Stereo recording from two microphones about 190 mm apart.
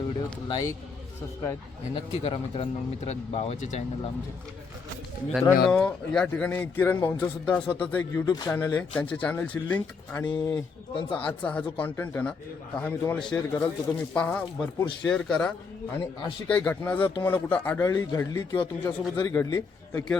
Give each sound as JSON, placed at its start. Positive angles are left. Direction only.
{"t": 0.4, "sound": "a man's voice", "side_deg": 20}
{"t": 2.0, "sound": "speech", "side_deg": 25}
{"t": 5.3, "sound": "speech", "side_deg": 5}
{"t": 10.3, "sound": "a man's voice", "side_deg": 20}
{"t": 11.2, "sound": "a man's voice", "side_deg": 5}
{"t": 19.2, "sound": "speech", "side_deg": 15}